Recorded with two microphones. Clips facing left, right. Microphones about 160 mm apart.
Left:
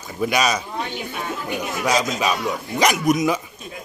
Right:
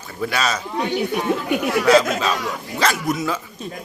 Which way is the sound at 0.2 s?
15° left (ahead or behind).